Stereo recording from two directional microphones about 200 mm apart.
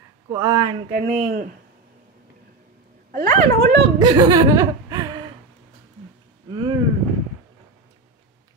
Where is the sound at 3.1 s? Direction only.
40° right (ahead or behind).